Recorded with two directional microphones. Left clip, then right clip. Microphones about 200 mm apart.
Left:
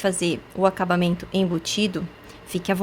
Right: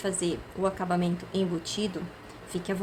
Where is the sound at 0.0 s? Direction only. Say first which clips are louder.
Left 7 dB; 45° left (ahead or behind).